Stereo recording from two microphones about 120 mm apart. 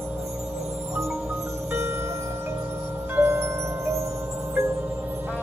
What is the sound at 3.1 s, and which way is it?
Glockenspiel, 20° right (ahead or behind).